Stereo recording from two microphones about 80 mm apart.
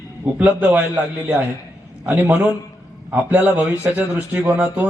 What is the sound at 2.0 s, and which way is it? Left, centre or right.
A man's voice, right.